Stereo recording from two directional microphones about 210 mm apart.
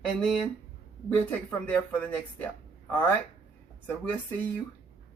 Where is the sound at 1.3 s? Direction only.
10° left (ahead or behind).